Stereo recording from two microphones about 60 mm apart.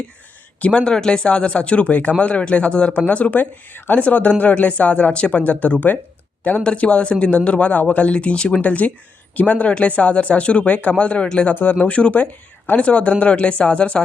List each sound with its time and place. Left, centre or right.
0.6 s speech: centre